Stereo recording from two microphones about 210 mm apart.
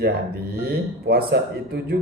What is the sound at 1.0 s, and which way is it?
Speech, 50° right (ahead or behind).